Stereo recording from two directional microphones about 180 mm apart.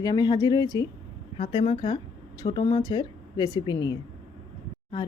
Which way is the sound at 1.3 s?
30° left (ahead or behind).